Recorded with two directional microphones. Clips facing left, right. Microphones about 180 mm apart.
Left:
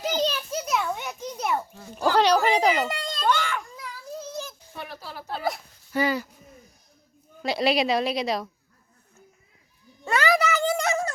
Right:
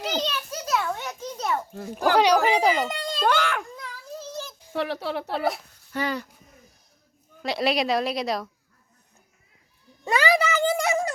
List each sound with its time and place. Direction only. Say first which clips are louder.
0.6 s a sound: right 2 dB; 15° left (ahead or behind)
2.0 s speech: right 1 dB; 10° right (ahead or behind)
2.7 s a child's voice: even; 5° left (ahead or behind)
3.2 s speech: right 2 dB; 65° right (ahead or behind)
3.8 s child singing: left 1 dB; 10° left (ahead or behind)
4.7 s speech: right 16 dB; 85° right; by 5.5 s 70° right (ahead or behind)
5.9 s speech: left 3 dB; 10° left (ahead or behind)
7.4 s a woman's voice: left 1 dB; centre (ahead or behind)
10.0 s a sound: right 1 dB; 10° right (ahead or behind)